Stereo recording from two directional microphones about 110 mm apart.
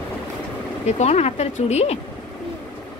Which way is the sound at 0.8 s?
90° left.